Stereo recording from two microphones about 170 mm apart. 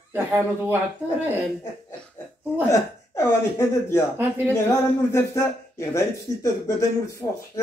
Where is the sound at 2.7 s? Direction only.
15° left (ahead or behind).